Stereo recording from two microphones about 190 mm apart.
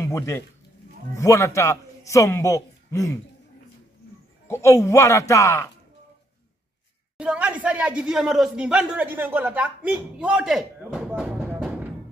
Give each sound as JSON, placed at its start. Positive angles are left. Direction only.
{"t": 0.0, "sound": "a man's voice", "side_deg": 15}
{"t": 4.5, "sound": "a man's voice", "side_deg": 15}
{"t": 7.2, "sound": "speech", "side_deg": -5}